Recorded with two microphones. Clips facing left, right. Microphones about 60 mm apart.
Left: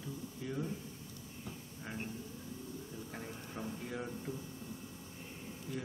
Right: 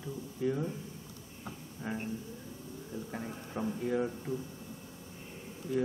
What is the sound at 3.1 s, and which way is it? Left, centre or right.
Speech, centre.